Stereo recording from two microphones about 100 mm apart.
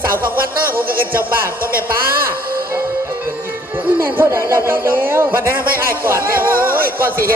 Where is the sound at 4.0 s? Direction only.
25° right (ahead or behind).